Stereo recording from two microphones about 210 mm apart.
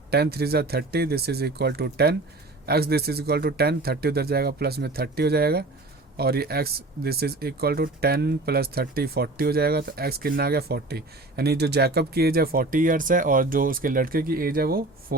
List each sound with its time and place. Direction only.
0.1 s speech: 50° right (ahead or behind)